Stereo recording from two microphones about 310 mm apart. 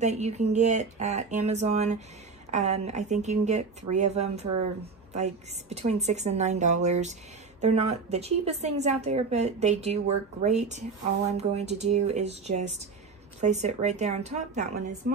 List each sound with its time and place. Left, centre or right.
0.0 s a woman's voice: right